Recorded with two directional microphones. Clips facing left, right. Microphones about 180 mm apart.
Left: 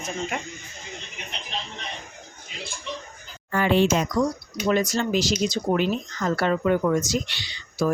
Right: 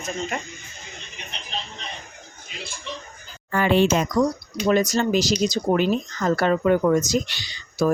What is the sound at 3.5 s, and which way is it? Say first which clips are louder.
Speech: right 2 dB; 55° right (ahead or behind).